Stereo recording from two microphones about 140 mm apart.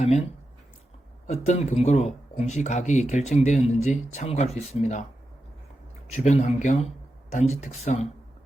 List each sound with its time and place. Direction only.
0.0 s speech: 50° left (ahead or behind)
1.3 s speech: 55° left (ahead or behind)
6.1 s speech: 55° left (ahead or behind)